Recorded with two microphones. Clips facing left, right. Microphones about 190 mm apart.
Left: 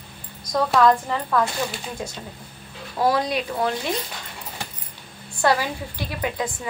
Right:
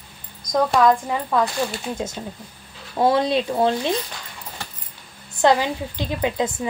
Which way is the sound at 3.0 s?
25° right (ahead or behind).